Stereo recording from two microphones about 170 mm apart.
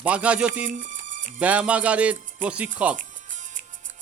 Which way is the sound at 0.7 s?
50° right (ahead or behind).